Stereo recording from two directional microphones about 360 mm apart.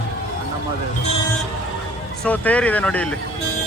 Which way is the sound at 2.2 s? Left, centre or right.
Centre.